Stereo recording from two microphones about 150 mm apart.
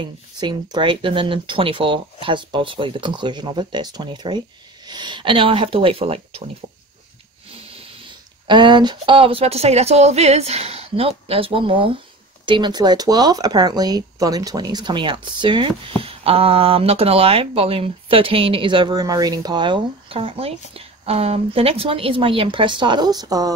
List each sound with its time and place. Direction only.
0.4 s speech: 30° right (ahead or behind)
7.5 s speech: 40° right (ahead or behind)